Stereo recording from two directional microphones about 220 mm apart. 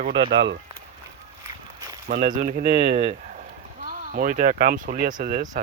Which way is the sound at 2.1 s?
40° right (ahead or behind).